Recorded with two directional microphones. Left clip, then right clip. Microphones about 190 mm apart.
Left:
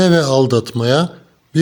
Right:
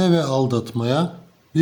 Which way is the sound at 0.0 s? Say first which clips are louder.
Left 7 dB; 30° left (ahead or behind).